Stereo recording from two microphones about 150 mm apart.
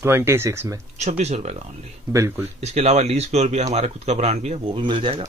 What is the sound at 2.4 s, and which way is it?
Speech, 45° right (ahead or behind).